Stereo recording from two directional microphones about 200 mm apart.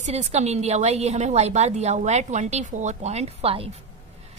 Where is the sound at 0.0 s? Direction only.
35° right (ahead or behind).